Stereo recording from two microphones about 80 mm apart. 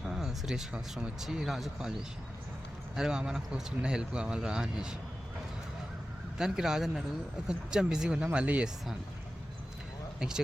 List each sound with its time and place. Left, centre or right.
0.0 s speech: centre
6.3 s speech: centre
10.2 s speech: centre